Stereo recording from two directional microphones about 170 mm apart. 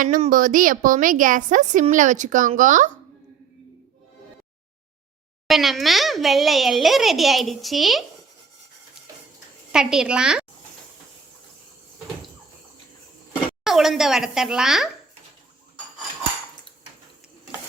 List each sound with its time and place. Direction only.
0.3 s a woman's voice: 50° right (ahead or behind)
5.5 s a child's voice: centre (ahead or behind)
9.7 s a child's voice: 5° right (ahead or behind)
13.7 s a child's voice: centre (ahead or behind)